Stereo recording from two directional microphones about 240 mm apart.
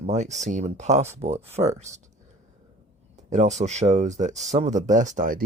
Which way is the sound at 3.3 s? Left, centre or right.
Right.